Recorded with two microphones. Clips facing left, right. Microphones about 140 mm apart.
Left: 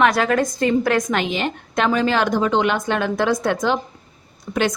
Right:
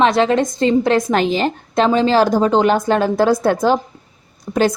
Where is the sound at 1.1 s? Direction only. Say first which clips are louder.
Right 5 dB; 35° right (ahead or behind).